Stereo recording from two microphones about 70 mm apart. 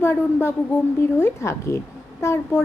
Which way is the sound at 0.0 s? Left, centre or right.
Left.